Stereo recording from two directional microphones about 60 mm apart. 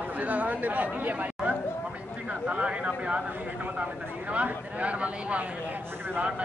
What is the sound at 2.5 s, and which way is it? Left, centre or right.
Speech, centre.